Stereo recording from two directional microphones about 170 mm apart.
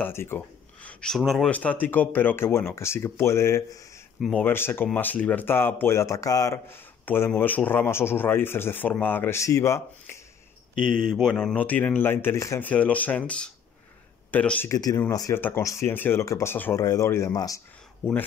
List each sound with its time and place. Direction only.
0.0 s speech: 15° left (ahead or behind)
0.8 s speech: 5° left (ahead or behind)
4.2 s speech: centre (ahead or behind)
4.5 s speech: 15° left (ahead or behind)
11.1 s speech: centre (ahead or behind); by 17.6 s 20° left (ahead or behind)